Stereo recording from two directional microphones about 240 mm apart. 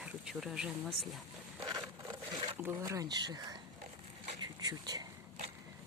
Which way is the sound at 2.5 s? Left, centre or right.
Centre.